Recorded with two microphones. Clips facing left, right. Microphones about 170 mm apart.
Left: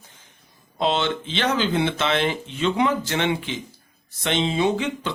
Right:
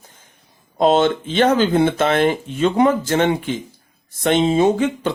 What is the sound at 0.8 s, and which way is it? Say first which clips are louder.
Speech: right 8 dB; 45° right (ahead or behind).